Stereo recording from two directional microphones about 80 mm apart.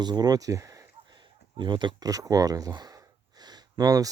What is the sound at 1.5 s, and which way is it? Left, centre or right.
Speech, right.